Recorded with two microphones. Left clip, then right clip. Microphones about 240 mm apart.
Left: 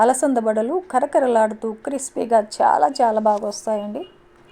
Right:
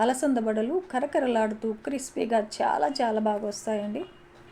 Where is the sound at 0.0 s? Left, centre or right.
Left.